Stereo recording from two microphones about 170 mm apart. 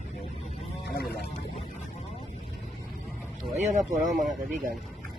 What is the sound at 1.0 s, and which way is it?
Speech, 70° left (ahead or behind).